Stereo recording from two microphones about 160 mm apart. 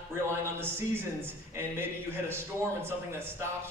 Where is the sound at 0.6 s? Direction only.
15° right (ahead or behind).